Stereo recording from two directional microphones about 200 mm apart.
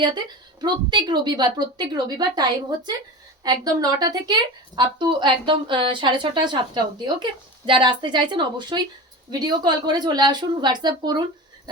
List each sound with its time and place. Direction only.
0.0 s a woman's voice: 20° right (ahead or behind)